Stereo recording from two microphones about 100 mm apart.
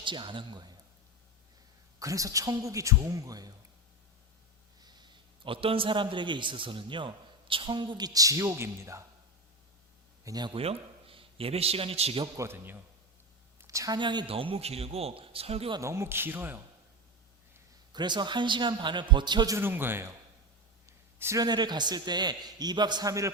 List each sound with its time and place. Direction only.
0.0 s a man's voice: 55° right (ahead or behind)
2.0 s a man's voice: 35° right (ahead or behind)
4.8 s a man's voice: 45° right (ahead or behind); by 9.0 s 30° right (ahead or behind)
10.2 s a man's voice: 40° right (ahead or behind)
10.5 s a man's voice: 75° right (ahead or behind)
12.4 s a man's voice: 25° right (ahead or behind)
13.6 s a sound: 30° right (ahead or behind)
14.0 s a man's voice: 45° right (ahead or behind)
14.3 s a man's voice: 70° right (ahead or behind)
15.8 s a man's voice: 30° right (ahead or behind)
17.9 s a man's voice: 50° right (ahead or behind)
19.5 s a man's voice: 20° right (ahead or behind)
20.8 s a sound: 30° right (ahead or behind)
21.4 s a man's voice: 45° right (ahead or behind)